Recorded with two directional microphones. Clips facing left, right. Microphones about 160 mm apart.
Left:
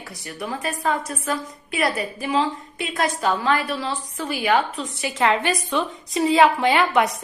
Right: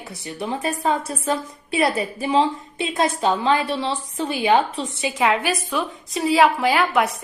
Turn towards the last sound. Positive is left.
turn(degrees=0)  # may be behind; listen again after turning